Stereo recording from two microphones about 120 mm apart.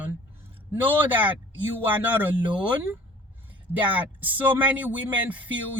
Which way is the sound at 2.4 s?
40° right (ahead or behind).